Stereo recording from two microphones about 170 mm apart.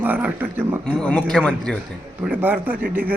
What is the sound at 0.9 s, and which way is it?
Speech, 5° left (ahead or behind).